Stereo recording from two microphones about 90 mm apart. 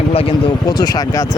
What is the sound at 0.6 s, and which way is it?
Speech, 50° left (ahead or behind).